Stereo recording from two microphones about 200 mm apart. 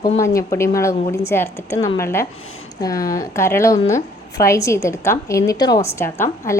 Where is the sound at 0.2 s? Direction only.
15° left (ahead or behind).